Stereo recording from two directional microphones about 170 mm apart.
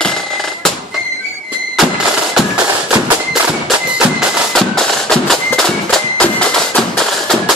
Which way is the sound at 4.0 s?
Centre (ahead or behind).